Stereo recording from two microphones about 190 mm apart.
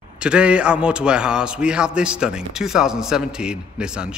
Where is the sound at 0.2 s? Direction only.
5° right (ahead or behind).